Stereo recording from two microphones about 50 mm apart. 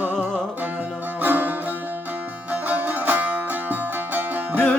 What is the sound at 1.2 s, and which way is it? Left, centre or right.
Music, right.